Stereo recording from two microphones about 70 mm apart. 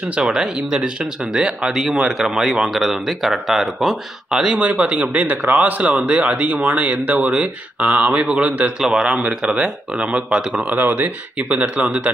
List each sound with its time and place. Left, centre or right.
0.1 s speech: centre
10.7 s speech: right